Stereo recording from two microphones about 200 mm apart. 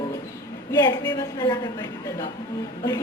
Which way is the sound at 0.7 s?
20° left (ahead or behind).